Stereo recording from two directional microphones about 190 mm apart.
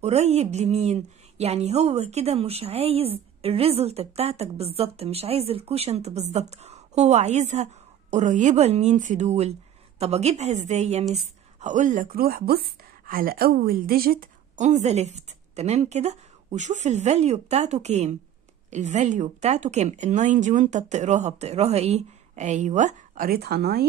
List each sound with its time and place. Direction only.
0.0 s a woman's voice: 35° right (ahead or behind); by 23.9 s 55° right (ahead or behind)